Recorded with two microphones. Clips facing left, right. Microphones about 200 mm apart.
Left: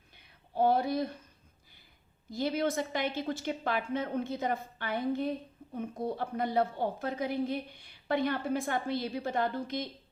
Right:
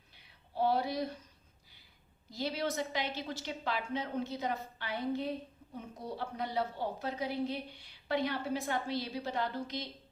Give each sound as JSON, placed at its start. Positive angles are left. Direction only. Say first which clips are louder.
{"t": 0.5, "sound": "a woman's voice", "louder": "left 4 dB", "side_deg": 50}
{"t": 2.3, "sound": "a woman's voice", "louder": "left 5 dB", "side_deg": 50}